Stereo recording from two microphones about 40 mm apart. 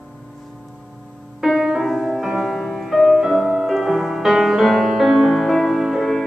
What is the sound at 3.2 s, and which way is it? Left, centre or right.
Music, centre.